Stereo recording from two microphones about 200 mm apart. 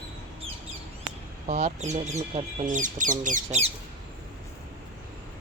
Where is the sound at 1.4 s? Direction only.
35° right (ahead or behind).